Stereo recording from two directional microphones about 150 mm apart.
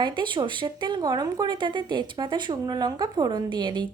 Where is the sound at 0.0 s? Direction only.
30° right (ahead or behind).